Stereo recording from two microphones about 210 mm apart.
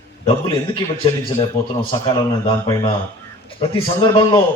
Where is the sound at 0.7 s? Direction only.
25° left (ahead or behind).